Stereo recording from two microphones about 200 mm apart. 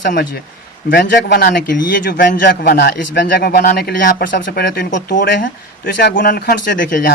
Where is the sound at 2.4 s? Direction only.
60° left (ahead or behind).